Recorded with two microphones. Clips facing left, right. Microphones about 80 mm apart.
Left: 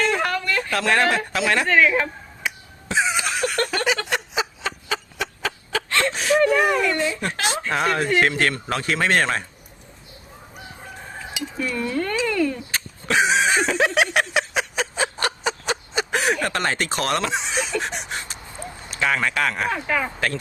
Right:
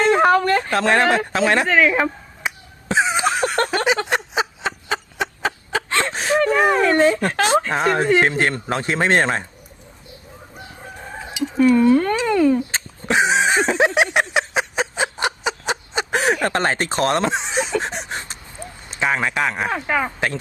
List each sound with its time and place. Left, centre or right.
0.0 s speech: right
1.7 s speech: centre
2.9 s a sound: right
7.0 s speech: right
7.8 s speech: right
11.6 s speech: right